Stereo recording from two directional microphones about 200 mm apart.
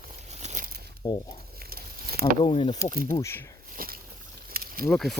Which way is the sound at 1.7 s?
50° right (ahead or behind).